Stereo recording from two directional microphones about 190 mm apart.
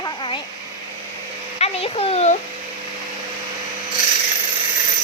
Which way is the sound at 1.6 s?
30° left (ahead or behind).